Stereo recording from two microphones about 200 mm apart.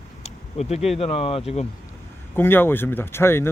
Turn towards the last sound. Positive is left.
turn(degrees=10)  # may be behind; listen again after turning